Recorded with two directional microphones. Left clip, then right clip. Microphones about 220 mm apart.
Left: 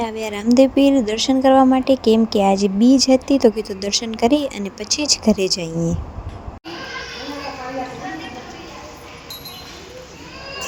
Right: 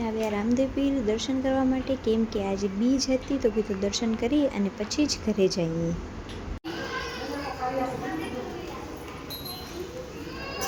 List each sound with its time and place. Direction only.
0.0 s speech: 40° left (ahead or behind)